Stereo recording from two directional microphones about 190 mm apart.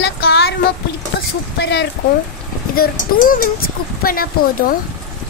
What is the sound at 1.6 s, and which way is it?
Speech, 65° left (ahead or behind).